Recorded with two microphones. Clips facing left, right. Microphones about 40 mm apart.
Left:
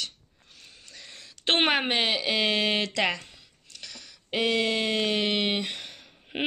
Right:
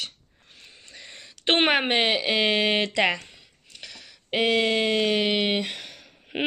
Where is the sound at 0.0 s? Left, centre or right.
Right.